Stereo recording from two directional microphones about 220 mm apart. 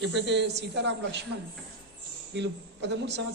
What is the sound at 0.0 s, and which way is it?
A man's voice, 55° right (ahead or behind).